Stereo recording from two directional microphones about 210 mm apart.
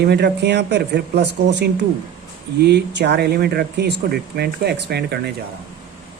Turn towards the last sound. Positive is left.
turn(degrees=-50)  # may be behind; listen again after turning